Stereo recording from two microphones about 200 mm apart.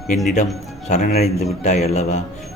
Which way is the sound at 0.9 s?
35° left (ahead or behind).